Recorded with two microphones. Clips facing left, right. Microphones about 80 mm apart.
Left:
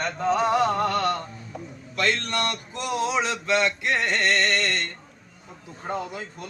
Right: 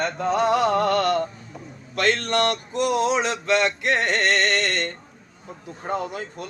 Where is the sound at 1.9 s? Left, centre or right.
Right.